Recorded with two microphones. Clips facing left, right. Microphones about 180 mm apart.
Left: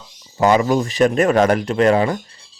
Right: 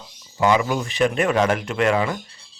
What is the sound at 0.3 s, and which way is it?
Speech, 40° left (ahead or behind).